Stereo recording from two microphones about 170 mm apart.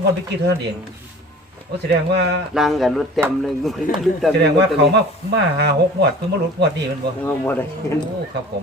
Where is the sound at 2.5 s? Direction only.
Centre (ahead or behind).